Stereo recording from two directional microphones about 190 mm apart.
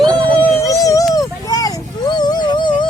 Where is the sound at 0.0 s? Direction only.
25° right (ahead or behind).